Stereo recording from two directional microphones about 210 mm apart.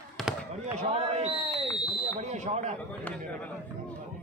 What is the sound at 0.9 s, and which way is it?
Speech, 30° right (ahead or behind).